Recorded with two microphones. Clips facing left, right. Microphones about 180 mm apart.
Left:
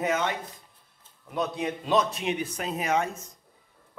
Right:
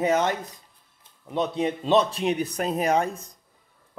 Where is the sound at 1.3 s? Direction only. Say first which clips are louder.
Right 4 dB; 25° right (ahead or behind).